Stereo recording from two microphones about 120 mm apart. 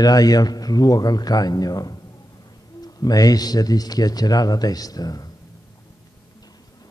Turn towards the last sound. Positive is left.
turn(degrees=30)  # may be behind; listen again after turning